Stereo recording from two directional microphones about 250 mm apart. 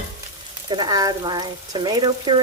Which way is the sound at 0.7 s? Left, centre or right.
Centre.